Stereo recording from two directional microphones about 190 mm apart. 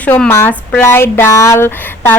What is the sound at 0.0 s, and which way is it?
A woman's voice, 10° left (ahead or behind).